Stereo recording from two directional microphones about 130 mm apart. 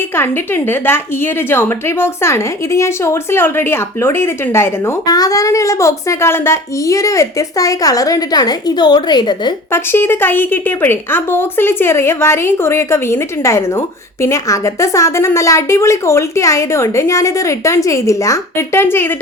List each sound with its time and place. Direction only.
0.2 s a woman's voice: 15° left (ahead or behind); by 9.5 s 35° left (ahead or behind)
9.7 s a woman's voice: 15° left (ahead or behind)